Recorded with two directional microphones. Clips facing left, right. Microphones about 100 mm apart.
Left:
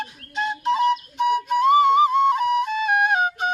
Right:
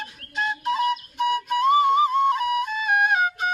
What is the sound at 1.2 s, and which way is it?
Music, 15° left (ahead or behind).